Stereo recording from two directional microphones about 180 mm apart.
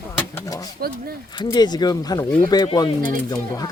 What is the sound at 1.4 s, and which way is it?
Speech, 20° left (ahead or behind).